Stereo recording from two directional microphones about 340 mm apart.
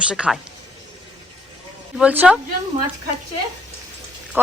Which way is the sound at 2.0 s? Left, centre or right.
Centre.